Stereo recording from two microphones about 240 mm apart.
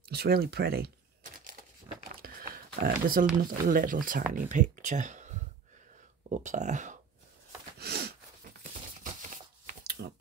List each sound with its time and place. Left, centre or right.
0.0 s typing: right
3.3 s speech: right
7.8 s a sound: right